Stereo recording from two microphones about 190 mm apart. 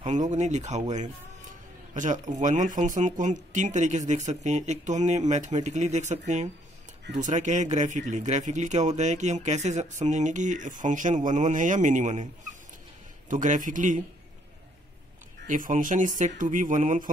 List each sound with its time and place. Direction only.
0.0 s speech: 40° right (ahead or behind)
15.4 s speech: 45° right (ahead or behind)